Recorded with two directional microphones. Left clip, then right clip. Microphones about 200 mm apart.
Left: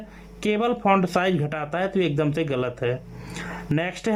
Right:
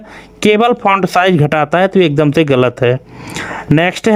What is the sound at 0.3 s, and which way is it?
Speech, 50° right (ahead or behind).